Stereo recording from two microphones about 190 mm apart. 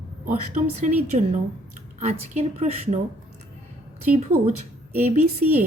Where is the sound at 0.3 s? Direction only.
40° right (ahead or behind).